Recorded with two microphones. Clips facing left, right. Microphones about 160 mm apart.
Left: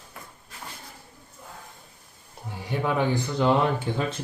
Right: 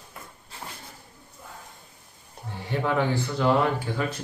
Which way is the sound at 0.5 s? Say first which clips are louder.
Right 2 dB; 30° right (ahead or behind).